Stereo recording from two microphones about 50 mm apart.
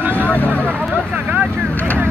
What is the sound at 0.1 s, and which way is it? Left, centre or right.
Vehicle, left.